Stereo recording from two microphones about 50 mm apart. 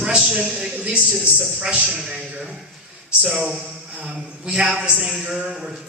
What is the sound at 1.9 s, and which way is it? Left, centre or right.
Speech, centre.